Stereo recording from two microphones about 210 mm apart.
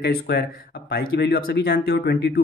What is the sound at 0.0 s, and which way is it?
Speech, 50° left (ahead or behind).